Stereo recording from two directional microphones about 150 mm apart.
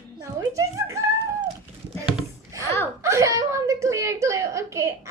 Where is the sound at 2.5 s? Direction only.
20° right (ahead or behind).